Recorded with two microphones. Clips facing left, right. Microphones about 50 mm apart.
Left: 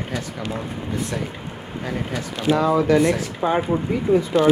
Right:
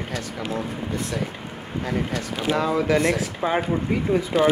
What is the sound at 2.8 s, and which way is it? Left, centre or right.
Speech, centre.